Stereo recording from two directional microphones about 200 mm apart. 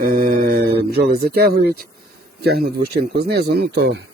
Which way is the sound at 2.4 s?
50° right (ahead or behind).